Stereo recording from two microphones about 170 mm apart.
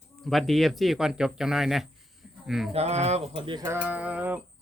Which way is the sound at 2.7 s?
40° right (ahead or behind).